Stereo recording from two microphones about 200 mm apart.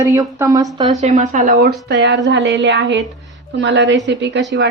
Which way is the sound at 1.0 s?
35° right (ahead or behind).